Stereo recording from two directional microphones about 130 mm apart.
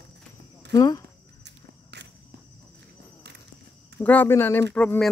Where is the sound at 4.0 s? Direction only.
15° left (ahead or behind).